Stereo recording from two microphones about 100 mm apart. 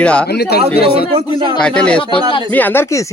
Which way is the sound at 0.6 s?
80° right.